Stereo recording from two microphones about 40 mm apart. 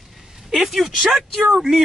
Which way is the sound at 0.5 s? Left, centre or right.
Centre.